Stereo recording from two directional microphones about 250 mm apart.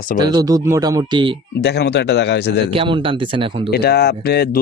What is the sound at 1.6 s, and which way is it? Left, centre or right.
Speech, left.